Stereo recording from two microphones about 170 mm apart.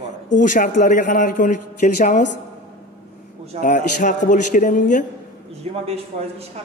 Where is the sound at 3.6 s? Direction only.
50° left (ahead or behind).